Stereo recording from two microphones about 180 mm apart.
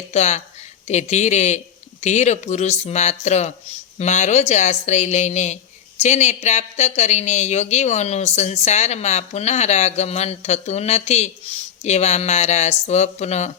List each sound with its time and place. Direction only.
0.1 s speech: 40° left (ahead or behind)